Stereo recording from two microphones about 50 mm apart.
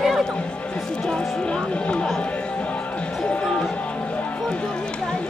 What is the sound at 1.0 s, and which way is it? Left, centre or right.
Music, centre.